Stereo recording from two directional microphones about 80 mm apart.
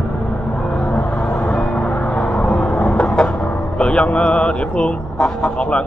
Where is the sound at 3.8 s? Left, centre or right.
Centre.